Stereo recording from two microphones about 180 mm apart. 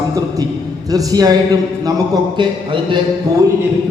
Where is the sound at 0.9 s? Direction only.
20° right (ahead or behind).